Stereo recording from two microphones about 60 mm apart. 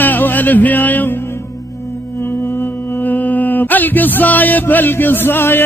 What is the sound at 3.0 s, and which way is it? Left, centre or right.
Mantra, left.